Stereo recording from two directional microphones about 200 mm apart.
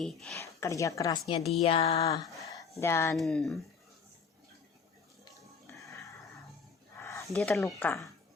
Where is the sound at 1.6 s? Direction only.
25° left (ahead or behind).